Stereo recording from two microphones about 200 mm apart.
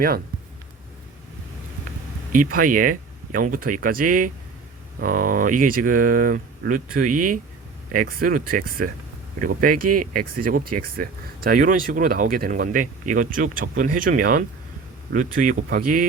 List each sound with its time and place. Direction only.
2.3 s speech: 45° right (ahead or behind)